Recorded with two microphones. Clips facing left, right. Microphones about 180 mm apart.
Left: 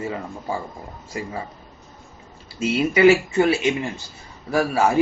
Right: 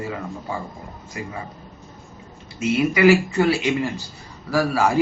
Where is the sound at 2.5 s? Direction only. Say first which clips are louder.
Even; 25° left (ahead or behind).